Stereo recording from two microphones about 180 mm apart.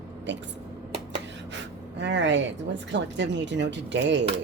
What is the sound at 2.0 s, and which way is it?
Speech, 85° right.